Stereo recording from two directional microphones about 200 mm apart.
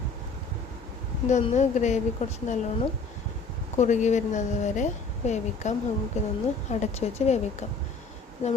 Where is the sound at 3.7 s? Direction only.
35° left (ahead or behind).